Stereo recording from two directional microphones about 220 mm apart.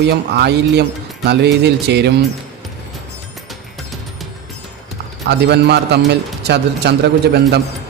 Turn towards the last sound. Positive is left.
turn(degrees=-50)  # may be behind; listen again after turning